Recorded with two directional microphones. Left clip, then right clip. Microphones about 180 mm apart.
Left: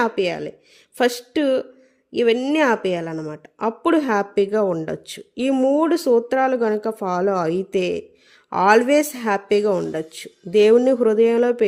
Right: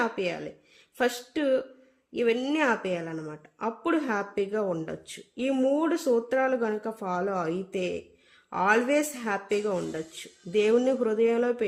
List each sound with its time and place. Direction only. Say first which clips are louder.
0.0 s speech: left 8 dB; 45° left (ahead or behind)